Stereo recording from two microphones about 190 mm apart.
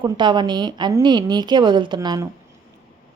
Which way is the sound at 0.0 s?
25° right (ahead or behind).